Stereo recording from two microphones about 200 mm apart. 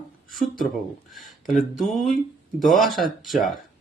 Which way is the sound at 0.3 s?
Centre (ahead or behind).